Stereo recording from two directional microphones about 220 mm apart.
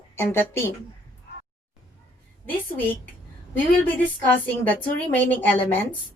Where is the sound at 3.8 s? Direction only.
10° left (ahead or behind).